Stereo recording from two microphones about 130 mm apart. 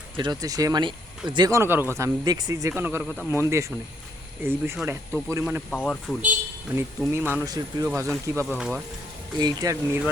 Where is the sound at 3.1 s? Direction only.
20° left (ahead or behind).